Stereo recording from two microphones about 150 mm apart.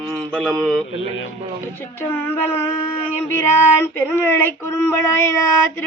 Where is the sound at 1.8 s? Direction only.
15° left (ahead or behind).